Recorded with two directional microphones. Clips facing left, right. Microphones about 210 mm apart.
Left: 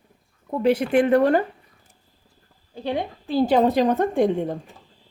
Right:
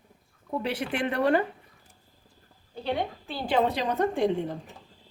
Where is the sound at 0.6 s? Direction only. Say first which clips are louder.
Left 12 dB; 45° left (ahead or behind).